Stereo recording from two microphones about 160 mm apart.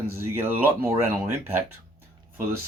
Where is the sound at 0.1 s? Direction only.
15° right (ahead or behind).